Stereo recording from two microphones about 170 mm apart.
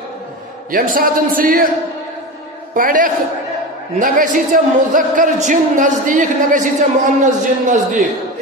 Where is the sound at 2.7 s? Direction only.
50° right (ahead or behind).